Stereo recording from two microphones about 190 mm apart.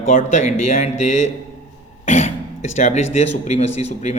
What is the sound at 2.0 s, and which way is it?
Cough, 35° left (ahead or behind).